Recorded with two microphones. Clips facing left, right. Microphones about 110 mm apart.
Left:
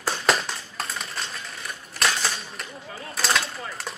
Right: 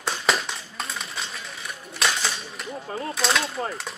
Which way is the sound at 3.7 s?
Centre (ahead or behind).